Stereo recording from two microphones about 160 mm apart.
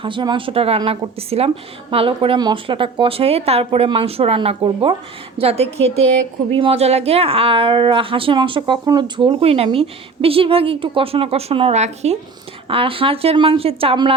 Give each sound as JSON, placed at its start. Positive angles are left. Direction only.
{"t": 0.0, "sound": "a woman's voice", "side_deg": -30}